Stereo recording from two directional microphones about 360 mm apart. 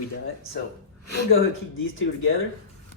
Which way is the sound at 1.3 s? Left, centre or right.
Left.